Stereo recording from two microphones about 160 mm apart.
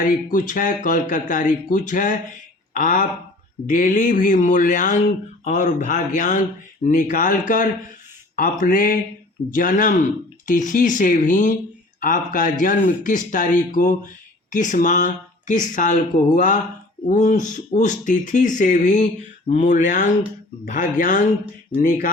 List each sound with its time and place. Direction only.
0.3 s speech: 55° left (ahead or behind)